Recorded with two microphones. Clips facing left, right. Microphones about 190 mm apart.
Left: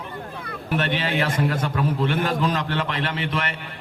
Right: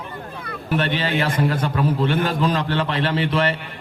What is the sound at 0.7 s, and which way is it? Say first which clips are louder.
A man's voice: right 2 dB; 35° right (ahead or behind).